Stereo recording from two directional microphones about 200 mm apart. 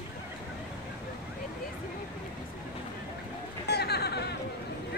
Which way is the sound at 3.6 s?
55° left (ahead or behind).